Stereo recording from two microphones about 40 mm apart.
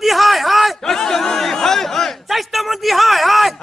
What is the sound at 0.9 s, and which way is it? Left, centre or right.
Chatter, centre.